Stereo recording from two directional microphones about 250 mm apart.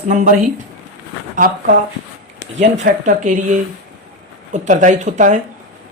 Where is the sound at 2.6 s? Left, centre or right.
Right.